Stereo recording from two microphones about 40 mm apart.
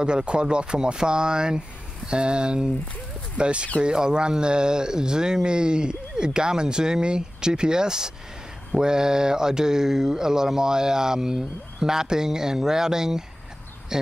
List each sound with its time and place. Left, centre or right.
0.0 s speech: right